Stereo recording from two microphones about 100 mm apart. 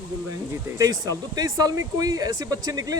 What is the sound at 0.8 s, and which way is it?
Speech, 40° right (ahead or behind).